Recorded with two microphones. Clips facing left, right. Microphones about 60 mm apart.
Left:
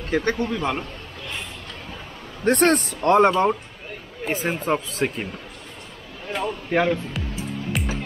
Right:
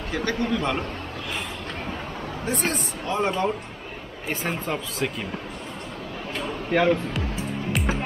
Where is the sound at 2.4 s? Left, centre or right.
Left.